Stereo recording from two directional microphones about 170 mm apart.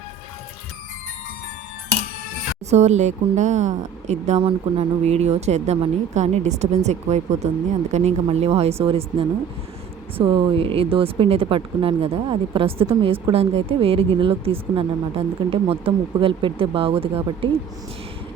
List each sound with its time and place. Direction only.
2.6 s speech: 40° right (ahead or behind)
4.4 s speech: 30° right (ahead or behind)